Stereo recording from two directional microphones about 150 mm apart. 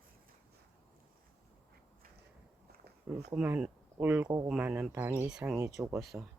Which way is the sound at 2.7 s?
90° right.